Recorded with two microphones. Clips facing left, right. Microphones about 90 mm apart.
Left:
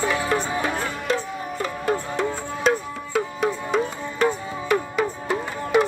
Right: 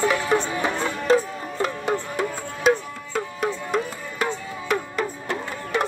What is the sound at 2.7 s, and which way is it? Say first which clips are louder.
Music: right 2 dB; 5° right (ahead or behind).